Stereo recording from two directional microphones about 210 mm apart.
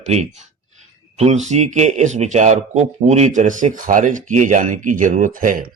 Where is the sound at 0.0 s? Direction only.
30° right (ahead or behind).